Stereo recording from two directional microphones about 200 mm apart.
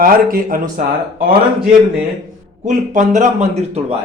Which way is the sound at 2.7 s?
40° right (ahead or behind).